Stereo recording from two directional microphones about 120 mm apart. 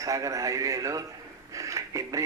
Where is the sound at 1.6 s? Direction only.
25° right (ahead or behind).